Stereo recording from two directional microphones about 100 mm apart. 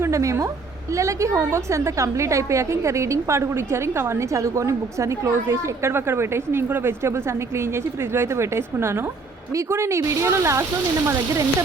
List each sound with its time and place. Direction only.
0.0 s a woman's voice: 30° right (ahead or behind)